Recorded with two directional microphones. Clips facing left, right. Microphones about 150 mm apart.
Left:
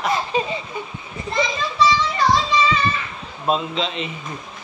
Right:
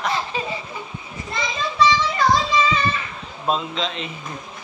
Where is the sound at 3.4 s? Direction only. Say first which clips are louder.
Left 2 dB; centre (ahead or behind).